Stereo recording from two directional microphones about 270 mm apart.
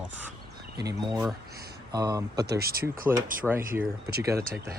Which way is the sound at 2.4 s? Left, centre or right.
Right.